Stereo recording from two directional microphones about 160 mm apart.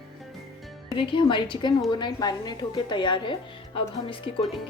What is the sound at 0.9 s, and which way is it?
A woman's voice, 30° left (ahead or behind).